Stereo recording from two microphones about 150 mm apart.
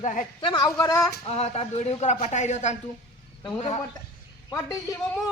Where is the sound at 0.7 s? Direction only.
20° left (ahead or behind).